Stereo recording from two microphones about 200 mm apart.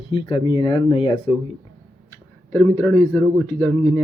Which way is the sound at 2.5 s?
10° left (ahead or behind).